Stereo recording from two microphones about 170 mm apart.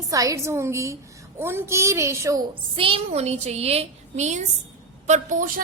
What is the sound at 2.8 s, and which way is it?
A woman's voice, 35° right (ahead or behind).